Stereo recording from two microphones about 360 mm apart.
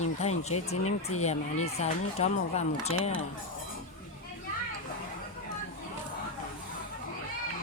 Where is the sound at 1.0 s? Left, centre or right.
Left.